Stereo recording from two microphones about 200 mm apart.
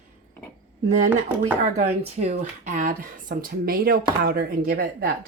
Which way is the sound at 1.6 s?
35° right (ahead or behind).